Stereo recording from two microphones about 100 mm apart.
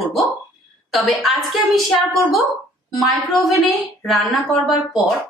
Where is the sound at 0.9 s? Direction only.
Centre (ahead or behind).